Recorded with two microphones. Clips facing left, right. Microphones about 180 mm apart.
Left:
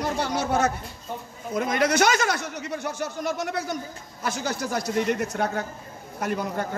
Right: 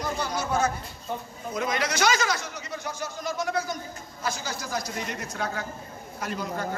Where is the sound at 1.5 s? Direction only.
55° left (ahead or behind).